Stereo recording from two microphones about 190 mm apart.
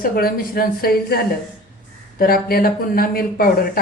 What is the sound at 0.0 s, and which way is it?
Speech, 50° left (ahead or behind).